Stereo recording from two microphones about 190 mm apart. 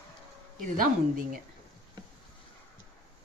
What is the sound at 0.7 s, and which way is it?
Speech, 45° right (ahead or behind).